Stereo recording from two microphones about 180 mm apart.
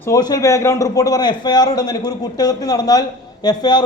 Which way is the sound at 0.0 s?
20° left (ahead or behind).